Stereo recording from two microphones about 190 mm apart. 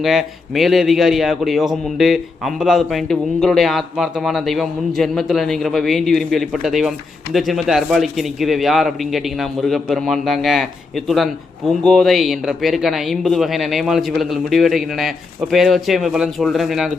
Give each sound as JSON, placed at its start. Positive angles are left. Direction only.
{"t": 0.0, "sound": "a man's voice", "side_deg": 0}